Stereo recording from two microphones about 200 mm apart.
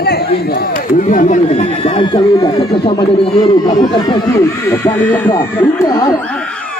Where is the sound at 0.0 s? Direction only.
50° left (ahead or behind).